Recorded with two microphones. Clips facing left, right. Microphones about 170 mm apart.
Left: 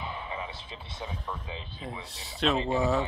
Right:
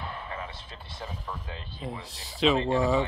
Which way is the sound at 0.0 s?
5° left (ahead or behind).